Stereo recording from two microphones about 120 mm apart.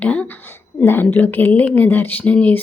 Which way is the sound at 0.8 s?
15° left (ahead or behind).